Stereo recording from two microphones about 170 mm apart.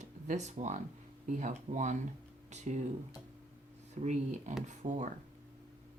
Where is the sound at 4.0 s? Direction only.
45° right (ahead or behind).